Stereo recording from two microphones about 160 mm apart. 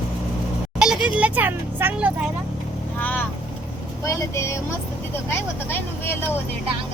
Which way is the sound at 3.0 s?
10° left (ahead or behind).